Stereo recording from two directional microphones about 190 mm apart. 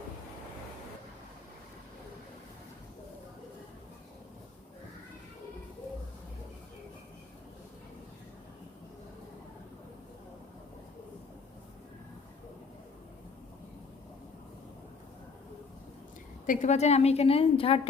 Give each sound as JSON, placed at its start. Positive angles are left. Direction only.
{"t": 16.5, "sound": "a woman's voice", "side_deg": 40}